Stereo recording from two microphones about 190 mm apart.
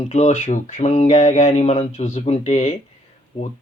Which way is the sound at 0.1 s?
35° left (ahead or behind).